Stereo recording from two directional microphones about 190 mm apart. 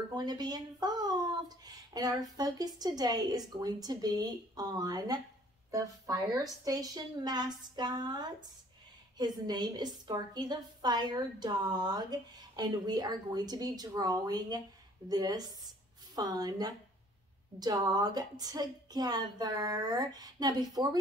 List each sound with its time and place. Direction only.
0.1 s a woman's voice: 20° right (ahead or behind)